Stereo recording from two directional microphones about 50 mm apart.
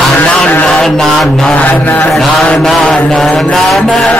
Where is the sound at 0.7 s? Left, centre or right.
Centre.